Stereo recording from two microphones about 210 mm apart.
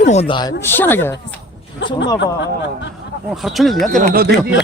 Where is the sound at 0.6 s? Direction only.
10° left (ahead or behind).